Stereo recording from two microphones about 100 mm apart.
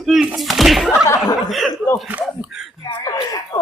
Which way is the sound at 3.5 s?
35° left (ahead or behind).